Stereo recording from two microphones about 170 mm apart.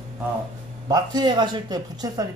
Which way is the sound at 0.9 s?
25° right (ahead or behind).